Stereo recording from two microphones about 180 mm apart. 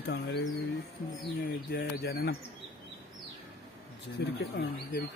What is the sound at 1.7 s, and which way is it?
Speech, 60° left (ahead or behind).